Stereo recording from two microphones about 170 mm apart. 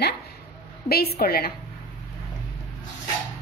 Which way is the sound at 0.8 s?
65° left (ahead or behind).